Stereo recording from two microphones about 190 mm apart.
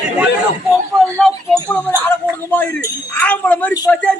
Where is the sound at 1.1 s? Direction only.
5° left (ahead or behind).